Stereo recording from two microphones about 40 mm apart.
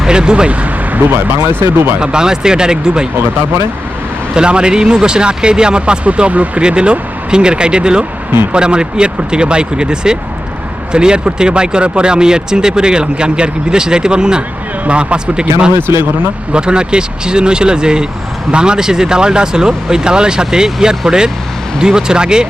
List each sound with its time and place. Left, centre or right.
0.0 s speech: right
1.1 s speech: right
2.0 s speech: centre
4.4 s speech: right
6.6 s speech: right
15.7 s speech: right
16.5 s speech: right